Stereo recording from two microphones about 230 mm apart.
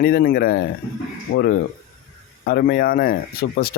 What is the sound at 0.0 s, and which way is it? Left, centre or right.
Speech, left.